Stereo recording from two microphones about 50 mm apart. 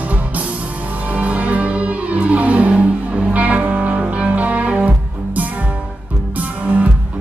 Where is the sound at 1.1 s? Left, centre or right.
Right.